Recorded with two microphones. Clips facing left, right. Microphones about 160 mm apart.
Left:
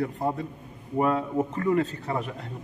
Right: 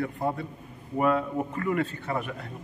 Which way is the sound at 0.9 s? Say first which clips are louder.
Left 1 dB; 25° left (ahead or behind).